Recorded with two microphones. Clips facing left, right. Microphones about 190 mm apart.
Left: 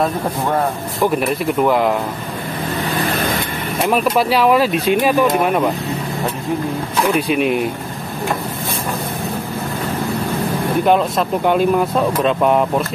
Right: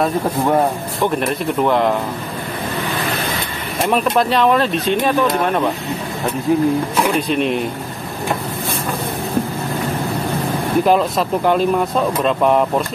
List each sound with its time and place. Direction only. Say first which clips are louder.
1.0 s speech: left 2 dB; 5° left (ahead or behind)
3.8 s speech: even; 5° left (ahead or behind)
7.2 s speech: left 1 dB; 5° left (ahead or behind)
10.9 s speech: left 1 dB; centre (ahead or behind)